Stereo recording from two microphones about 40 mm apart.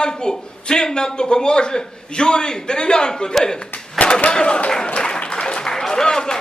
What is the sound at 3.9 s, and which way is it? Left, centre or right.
Speech, left.